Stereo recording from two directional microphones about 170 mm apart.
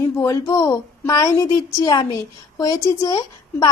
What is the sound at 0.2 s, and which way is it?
Speech, 20° left (ahead or behind).